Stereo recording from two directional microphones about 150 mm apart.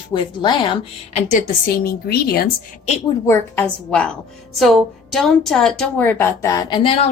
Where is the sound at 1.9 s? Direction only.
90° left.